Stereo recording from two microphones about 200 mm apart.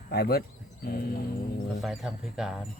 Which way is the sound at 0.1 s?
50° left (ahead or behind).